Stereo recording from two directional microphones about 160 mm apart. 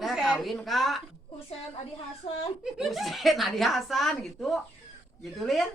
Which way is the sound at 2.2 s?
40° left (ahead or behind).